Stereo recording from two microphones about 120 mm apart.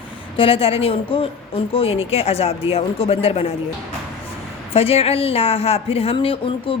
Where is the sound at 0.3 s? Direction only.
50° left (ahead or behind).